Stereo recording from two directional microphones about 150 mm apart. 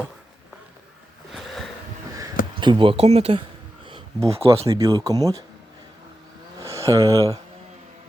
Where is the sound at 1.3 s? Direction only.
Centre (ahead or behind).